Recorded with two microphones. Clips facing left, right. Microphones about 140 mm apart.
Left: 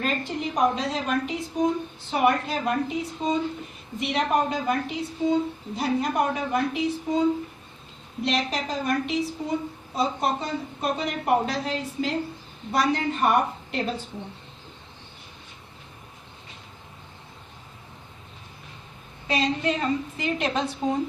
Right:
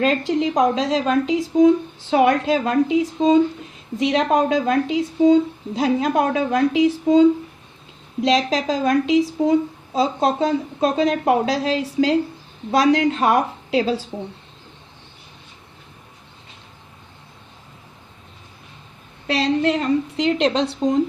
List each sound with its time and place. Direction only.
0.0 s a woman's voice: 90° right
19.3 s a woman's voice: 75° right (ahead or behind)